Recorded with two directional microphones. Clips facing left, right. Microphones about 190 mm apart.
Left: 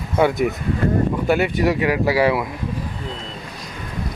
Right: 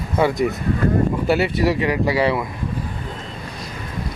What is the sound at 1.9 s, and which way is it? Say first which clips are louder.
Speech: left 1 dB; 5° left (ahead or behind).